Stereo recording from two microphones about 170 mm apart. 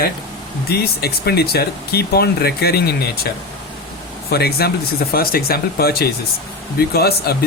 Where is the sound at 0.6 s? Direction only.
65° left (ahead or behind).